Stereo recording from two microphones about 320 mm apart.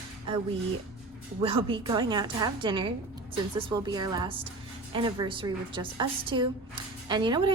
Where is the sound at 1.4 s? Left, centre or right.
Centre.